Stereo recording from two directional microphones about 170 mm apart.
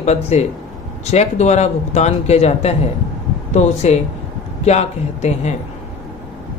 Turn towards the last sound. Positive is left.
turn(degrees=40)  # may be behind; listen again after turning